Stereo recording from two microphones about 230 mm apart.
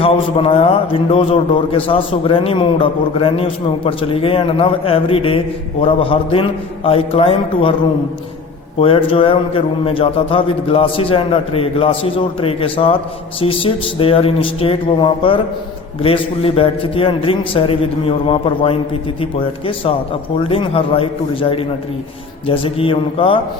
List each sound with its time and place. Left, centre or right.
0.0 s a man's voice: left
8.8 s a man's voice: left